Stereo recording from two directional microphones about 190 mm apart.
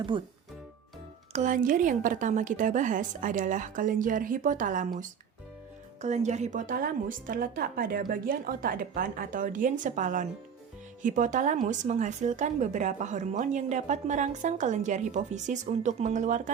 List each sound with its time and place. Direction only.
0.1 s speech: 25° right (ahead or behind)
1.3 s a woman's voice: 40° right (ahead or behind)